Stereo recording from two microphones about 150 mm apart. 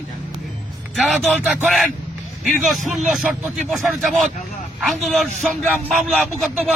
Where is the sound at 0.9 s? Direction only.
Centre (ahead or behind).